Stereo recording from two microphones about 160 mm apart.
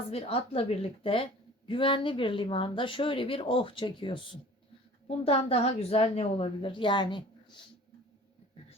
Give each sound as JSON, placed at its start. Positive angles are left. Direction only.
{"t": 0.1, "sound": "a woman's voice", "side_deg": 40}